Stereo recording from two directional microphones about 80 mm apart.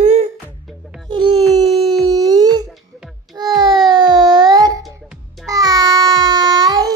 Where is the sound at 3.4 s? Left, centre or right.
Right.